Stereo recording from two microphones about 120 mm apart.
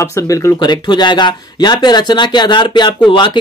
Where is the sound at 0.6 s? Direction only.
40° left (ahead or behind).